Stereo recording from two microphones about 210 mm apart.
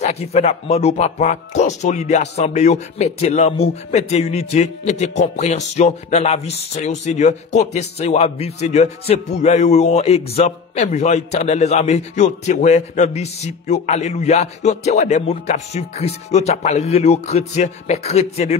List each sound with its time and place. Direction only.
0.0 s speech: 30° left (ahead or behind)